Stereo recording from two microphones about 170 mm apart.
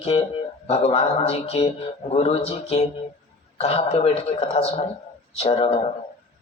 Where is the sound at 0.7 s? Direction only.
35° left (ahead or behind).